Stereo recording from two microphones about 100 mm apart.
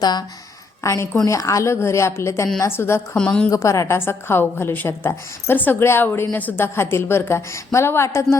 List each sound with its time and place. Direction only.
0.0 s a woman's voice: 45° left (ahead or behind)
0.8 s a woman's voice: 30° left (ahead or behind)
3.2 s a woman's voice: 10° left (ahead or behind)
3.5 s a woman's voice: 30° left (ahead or behind)